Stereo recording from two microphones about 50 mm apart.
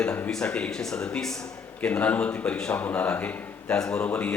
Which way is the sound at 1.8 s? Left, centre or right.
Left.